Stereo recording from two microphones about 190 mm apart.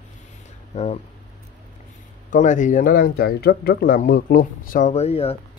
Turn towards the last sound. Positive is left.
turn(degrees=30)  # may be behind; listen again after turning